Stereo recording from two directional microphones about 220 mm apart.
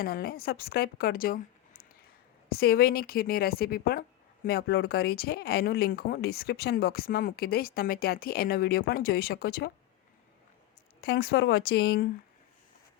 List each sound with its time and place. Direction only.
0.0 s speech: 45° left (ahead or behind)
11.0 s speech: 45° left (ahead or behind)